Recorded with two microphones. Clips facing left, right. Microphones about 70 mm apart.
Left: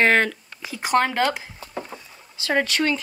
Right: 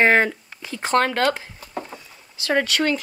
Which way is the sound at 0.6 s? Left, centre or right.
Centre.